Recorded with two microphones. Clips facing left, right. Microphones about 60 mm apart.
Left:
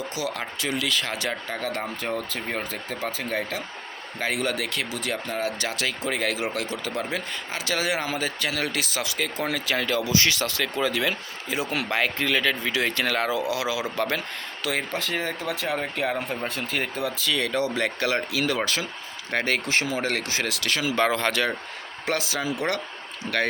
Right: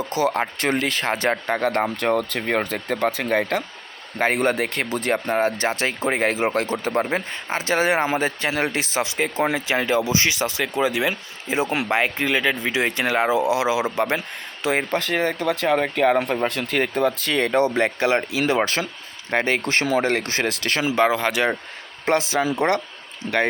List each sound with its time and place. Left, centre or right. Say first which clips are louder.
0.1 s speech: right 8 dB; right
4.2 s speech: right 7 dB; right
14.9 s speech: right 6 dB; right
16.8 s speech: right 6 dB; right
19.6 s speech: right 5 dB; right
20.9 s speech: right 3 dB; centre
22.0 s speech: right 7 dB; right